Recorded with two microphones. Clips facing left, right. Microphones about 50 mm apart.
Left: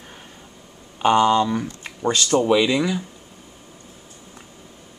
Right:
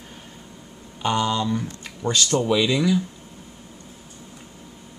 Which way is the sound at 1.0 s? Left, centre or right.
Left.